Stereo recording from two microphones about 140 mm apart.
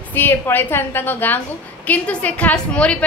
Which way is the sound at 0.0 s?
15° left (ahead or behind).